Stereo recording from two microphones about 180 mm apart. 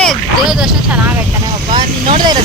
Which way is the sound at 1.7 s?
25° right (ahead or behind).